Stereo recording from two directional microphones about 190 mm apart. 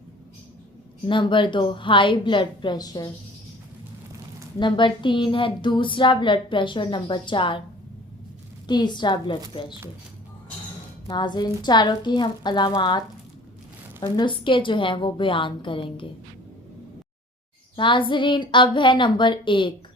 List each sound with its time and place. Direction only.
1.0 s speech: 25° left (ahead or behind)
4.6 s speech: 25° left (ahead or behind)
8.6 s speech: 25° left (ahead or behind)
11.1 s speech: 25° left (ahead or behind)
14.0 s speech: 25° left (ahead or behind)
17.7 s speech: 25° left (ahead or behind)